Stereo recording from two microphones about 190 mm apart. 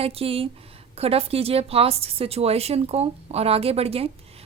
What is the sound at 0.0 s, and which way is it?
A woman's voice, 30° right (ahead or behind).